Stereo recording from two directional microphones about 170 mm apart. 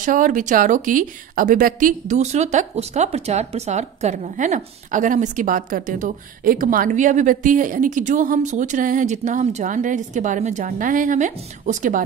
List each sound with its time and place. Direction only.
0.0 s a woman's voice: 50° right (ahead or behind)